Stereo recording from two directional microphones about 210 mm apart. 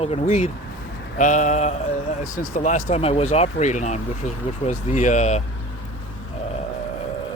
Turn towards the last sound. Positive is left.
turn(degrees=35)  # may be behind; listen again after turning